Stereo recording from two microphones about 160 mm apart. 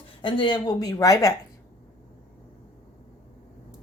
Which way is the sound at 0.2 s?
30° left (ahead or behind).